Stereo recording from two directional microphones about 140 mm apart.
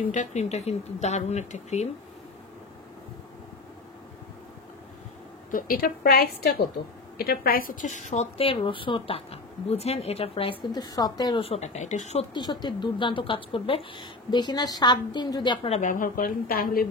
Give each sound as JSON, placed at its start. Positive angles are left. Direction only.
{"t": 0.1, "sound": "speech", "side_deg": 60}
{"t": 5.5, "sound": "a woman's voice", "side_deg": 80}
{"t": 7.2, "sound": "a woman's voice", "side_deg": 90}
{"t": 10.7, "sound": "a woman's voice", "side_deg": 30}
{"t": 11.4, "sound": "a woman's voice", "side_deg": 50}
{"t": 12.4, "sound": "speech", "side_deg": 30}
{"t": 15.7, "sound": "a woman's voice", "side_deg": 65}